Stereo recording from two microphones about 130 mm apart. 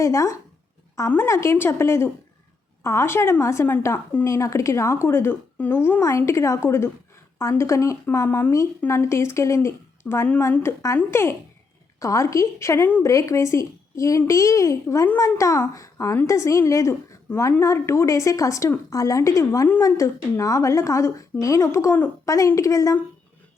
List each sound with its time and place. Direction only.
0.0 s speech: 25° left (ahead or behind)